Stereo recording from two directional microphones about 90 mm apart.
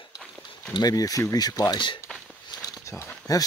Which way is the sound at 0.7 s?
45° left (ahead or behind).